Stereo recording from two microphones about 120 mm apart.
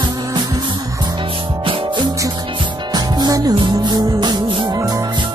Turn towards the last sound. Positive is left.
turn(degrees=-40)  # may be behind; listen again after turning